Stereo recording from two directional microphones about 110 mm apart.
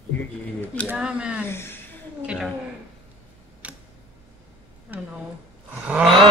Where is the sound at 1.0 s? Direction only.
10° right (ahead or behind).